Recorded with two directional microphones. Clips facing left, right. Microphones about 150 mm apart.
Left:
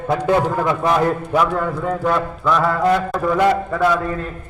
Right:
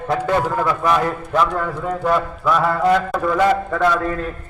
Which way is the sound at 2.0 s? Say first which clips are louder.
Right 1 dB; 5° right (ahead or behind).